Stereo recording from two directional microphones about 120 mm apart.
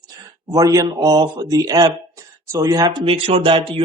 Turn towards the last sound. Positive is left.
turn(degrees=-45)  # may be behind; listen again after turning